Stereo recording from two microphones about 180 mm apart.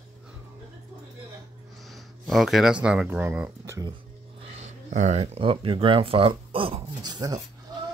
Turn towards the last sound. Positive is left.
turn(degrees=-20)  # may be behind; listen again after turning